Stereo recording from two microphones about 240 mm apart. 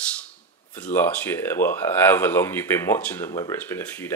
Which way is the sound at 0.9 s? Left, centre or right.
Centre.